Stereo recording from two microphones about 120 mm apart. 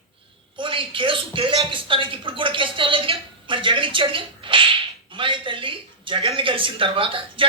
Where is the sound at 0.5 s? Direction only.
45° right (ahead or behind).